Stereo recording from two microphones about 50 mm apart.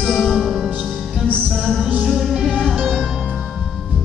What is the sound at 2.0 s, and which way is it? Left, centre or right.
Music, centre.